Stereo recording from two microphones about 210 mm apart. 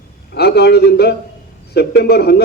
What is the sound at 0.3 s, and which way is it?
A man's voice, 50° left (ahead or behind).